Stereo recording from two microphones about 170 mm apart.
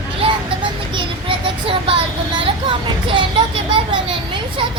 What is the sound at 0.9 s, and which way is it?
A child's voice, 30° right (ahead or behind).